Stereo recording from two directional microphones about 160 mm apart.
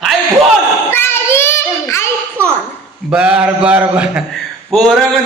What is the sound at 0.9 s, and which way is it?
Child singing, 15° left (ahead or behind).